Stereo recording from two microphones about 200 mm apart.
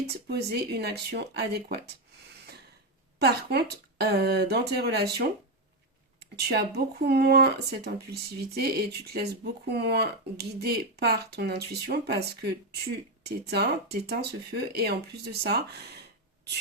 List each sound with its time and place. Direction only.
0.1 s speech: 55° right (ahead or behind)
3.2 s a woman's voice: 55° right (ahead or behind)